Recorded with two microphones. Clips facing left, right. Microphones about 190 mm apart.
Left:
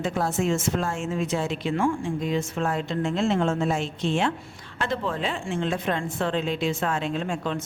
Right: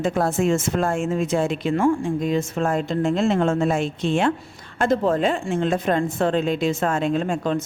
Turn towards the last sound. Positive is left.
turn(degrees=-45)  # may be behind; listen again after turning